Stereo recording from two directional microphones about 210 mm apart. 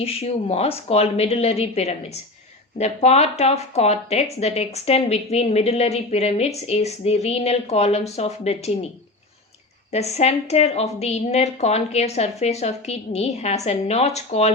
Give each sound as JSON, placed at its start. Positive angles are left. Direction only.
{"t": 0.0, "sound": "speech", "side_deg": 30}
{"t": 9.9, "sound": "speech", "side_deg": 30}